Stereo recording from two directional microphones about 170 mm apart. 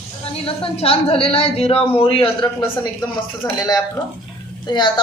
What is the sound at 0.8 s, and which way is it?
A man's voice, 35° left (ahead or behind).